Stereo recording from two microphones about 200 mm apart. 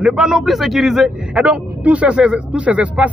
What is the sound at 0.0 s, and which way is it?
A man's voice, 5° right (ahead or behind).